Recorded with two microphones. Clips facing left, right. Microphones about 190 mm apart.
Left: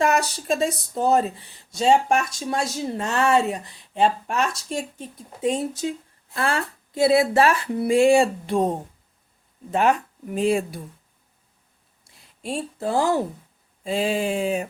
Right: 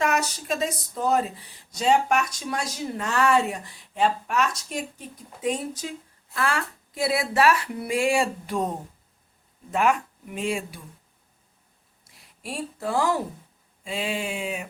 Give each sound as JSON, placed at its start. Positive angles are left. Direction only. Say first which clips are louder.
{"t": 0.0, "sound": "speech", "louder": "left 4 dB", "side_deg": 30}
{"t": 12.1, "sound": "speech", "louder": "left 5 dB", "side_deg": 25}